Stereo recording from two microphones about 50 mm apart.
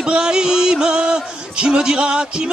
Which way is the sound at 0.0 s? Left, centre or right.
Centre.